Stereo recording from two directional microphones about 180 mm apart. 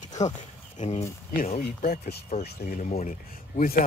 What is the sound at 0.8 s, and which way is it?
Speech, 45° left (ahead or behind).